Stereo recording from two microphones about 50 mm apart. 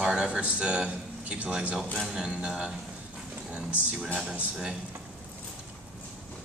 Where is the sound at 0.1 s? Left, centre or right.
Centre.